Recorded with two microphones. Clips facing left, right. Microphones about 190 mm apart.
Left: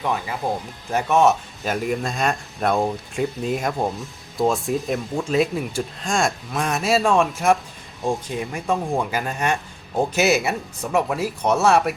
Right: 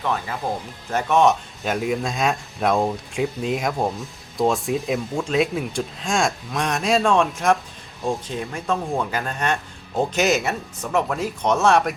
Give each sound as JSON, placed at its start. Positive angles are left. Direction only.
{"t": 0.0, "sound": "speech", "side_deg": 10}